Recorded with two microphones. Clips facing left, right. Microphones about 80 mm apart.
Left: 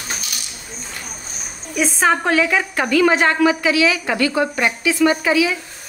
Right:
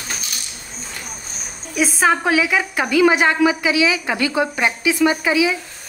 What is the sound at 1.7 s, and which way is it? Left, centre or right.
A woman's voice, centre.